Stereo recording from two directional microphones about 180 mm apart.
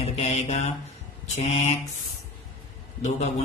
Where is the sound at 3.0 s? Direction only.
40° left (ahead or behind).